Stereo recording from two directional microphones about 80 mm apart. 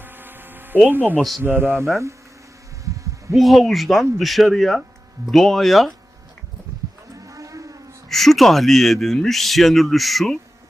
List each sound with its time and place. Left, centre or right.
0.0 s hum: right
0.9 s speech: right
2.8 s a sound: right
3.3 s a man's voice: centre
7.3 s vehicle: right
8.1 s a man's voice: centre